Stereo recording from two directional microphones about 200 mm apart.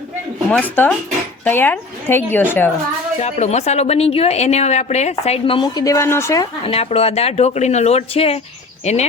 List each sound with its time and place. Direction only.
0.5 s a woman's voice: 5° left (ahead or behind)
3.2 s speech: 35° left (ahead or behind); by 6.5 s 15° left (ahead or behind)
6.7 s speech: 30° left (ahead or behind)